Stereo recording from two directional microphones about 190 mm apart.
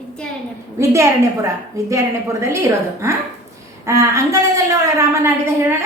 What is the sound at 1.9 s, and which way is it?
A woman's voice, 15° right (ahead or behind).